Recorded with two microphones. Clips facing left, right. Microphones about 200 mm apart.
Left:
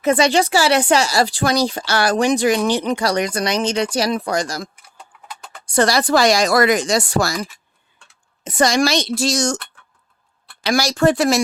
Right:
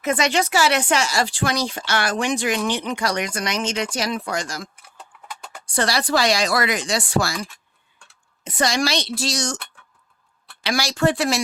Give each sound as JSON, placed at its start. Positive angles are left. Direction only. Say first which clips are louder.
{"t": 0.0, "sound": "speech", "louder": "left 5 dB", "side_deg": 35}
{"t": 5.7, "sound": "speech", "louder": "left 5 dB", "side_deg": 45}
{"t": 8.4, "sound": "speech", "louder": "left 5 dB", "side_deg": 45}
{"t": 10.6, "sound": "speech", "louder": "left 4 dB", "side_deg": 40}